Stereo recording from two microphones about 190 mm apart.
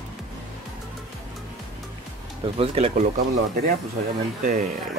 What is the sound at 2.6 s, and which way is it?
Speech, 35° right (ahead or behind).